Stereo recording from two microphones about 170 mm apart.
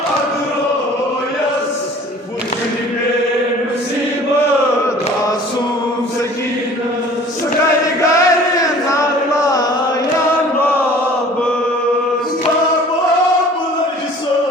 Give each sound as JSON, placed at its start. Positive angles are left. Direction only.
{"t": 8.1, "sound": "carnatic music", "side_deg": 20}